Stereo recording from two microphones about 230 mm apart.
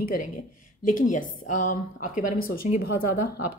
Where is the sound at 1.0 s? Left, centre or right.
Left.